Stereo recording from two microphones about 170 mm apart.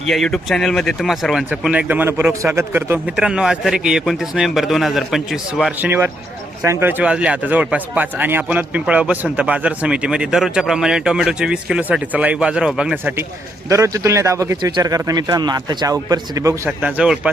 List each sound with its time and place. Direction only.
0.0 s speech: centre (ahead or behind); by 16.6 s 20° right (ahead or behind)
16.6 s speech: 5° right (ahead or behind)